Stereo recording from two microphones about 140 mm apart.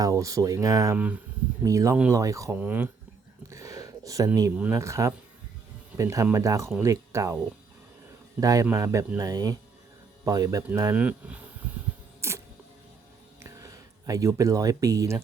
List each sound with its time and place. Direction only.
0.0 s speech: 25° right (ahead or behind)
0.9 s speech: 10° right (ahead or behind)
1.6 s speech: 25° right (ahead or behind)
2.6 s speech: 10° right (ahead or behind)
3.5 s a sound: 20° right (ahead or behind)
4.5 s speech: 15° right (ahead or behind)
8.4 s speech: 25° right (ahead or behind)
10.9 s speech: 10° right (ahead or behind)
12.2 s music: 20° right (ahead or behind)
13.4 s speech: 25° right (ahead or behind)